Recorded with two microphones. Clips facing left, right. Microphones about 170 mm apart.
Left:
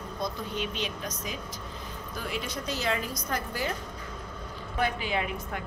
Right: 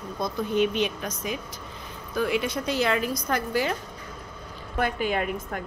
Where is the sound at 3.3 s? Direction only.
80° right.